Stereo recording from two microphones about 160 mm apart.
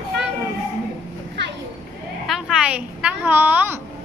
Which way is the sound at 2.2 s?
Centre (ahead or behind).